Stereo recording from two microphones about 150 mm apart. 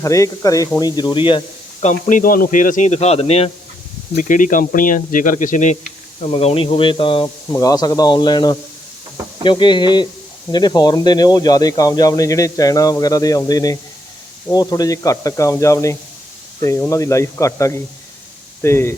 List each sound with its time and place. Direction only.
0.0 s speech: 20° left (ahead or behind)
1.8 s speech: 55° left (ahead or behind)
4.2 s speech: 60° left (ahead or behind); by 7.3 s 35° left (ahead or behind)
7.5 s speech: 25° left (ahead or behind)